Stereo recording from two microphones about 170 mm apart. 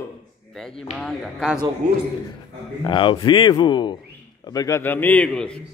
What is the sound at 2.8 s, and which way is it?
A man's voice, 30° left (ahead or behind).